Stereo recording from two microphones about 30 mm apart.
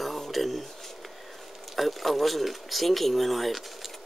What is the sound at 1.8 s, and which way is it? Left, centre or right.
Speech, centre.